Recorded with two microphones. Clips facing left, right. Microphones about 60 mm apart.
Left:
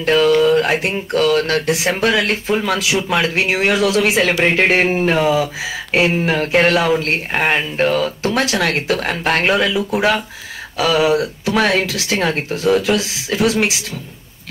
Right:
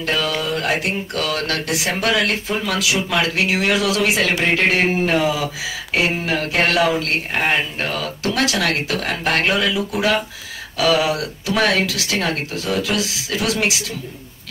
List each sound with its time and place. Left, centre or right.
0.0 s speech: left